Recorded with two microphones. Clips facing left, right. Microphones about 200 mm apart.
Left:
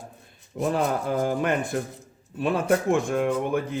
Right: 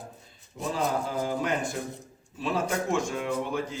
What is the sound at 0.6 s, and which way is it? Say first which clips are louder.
A man's voice: left 4 dB; 60° left (ahead or behind).